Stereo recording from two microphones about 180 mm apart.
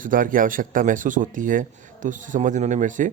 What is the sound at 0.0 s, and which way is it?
Speech, 50° right (ahead or behind).